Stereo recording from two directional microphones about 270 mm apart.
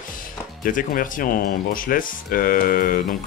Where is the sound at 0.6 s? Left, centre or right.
Left.